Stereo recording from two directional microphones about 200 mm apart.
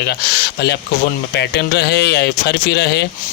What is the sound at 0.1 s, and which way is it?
Speech, 55° left (ahead or behind).